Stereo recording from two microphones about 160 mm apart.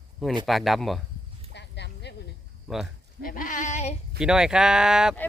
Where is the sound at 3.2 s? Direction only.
60° left (ahead or behind).